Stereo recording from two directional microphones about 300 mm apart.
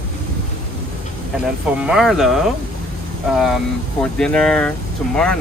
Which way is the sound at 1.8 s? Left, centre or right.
Centre.